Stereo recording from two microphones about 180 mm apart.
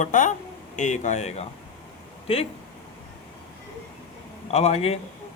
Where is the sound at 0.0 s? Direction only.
45° left (ahead or behind).